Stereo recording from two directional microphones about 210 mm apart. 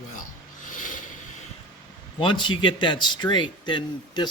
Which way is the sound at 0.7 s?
40° left (ahead or behind).